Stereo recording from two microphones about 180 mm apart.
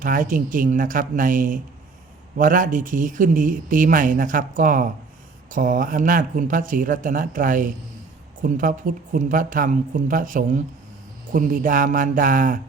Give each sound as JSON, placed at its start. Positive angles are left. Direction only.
{"t": 0.0, "sound": "speech", "side_deg": -50}